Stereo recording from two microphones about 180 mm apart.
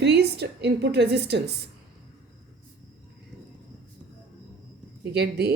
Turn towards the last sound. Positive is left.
turn(degrees=-60)  # may be behind; listen again after turning